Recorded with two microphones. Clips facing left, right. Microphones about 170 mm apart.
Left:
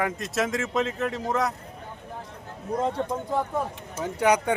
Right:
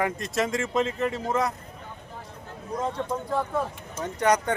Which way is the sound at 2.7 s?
30° left (ahead or behind).